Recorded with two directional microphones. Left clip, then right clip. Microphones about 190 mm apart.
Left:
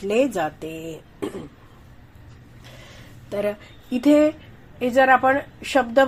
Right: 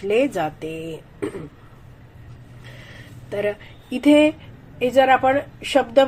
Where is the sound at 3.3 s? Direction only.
25° left (ahead or behind).